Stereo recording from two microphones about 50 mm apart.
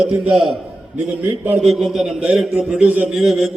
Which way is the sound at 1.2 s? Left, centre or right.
Right.